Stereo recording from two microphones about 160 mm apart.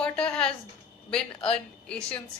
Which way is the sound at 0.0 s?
5° left (ahead or behind).